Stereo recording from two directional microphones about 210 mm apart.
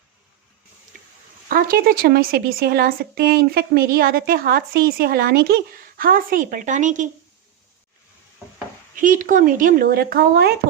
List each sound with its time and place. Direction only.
1.5 s a woman's voice: 45° right (ahead or behind)
9.0 s speech: 40° right (ahead or behind)